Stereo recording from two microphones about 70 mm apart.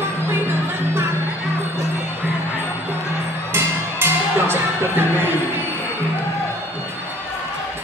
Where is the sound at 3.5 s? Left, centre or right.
Right.